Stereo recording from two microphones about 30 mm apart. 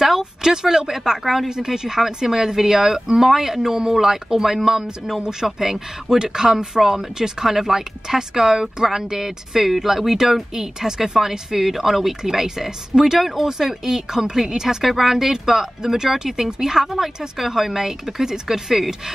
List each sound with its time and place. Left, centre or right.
0.2 s speech: centre
1.5 s speech: centre
14.8 s speech: centre
16.8 s speech: centre